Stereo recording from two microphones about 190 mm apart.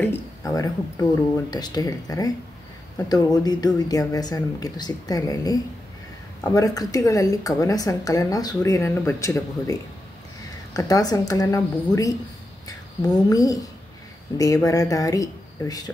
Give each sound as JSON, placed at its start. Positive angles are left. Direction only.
{"t": 0.0, "sound": "a woman's voice", "side_deg": 15}